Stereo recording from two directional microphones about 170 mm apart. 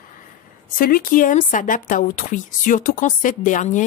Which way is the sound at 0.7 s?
55° left (ahead or behind).